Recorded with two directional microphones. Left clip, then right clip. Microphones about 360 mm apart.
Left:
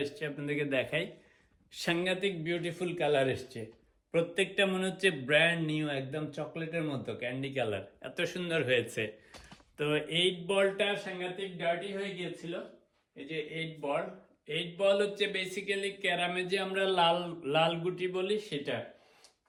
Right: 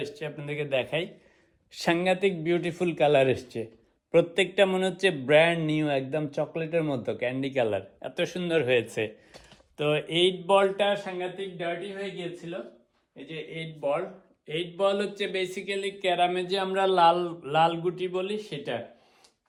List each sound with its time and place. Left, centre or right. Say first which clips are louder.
0.0 s speech: right 1 dB; centre
13.2 s speech: even; centre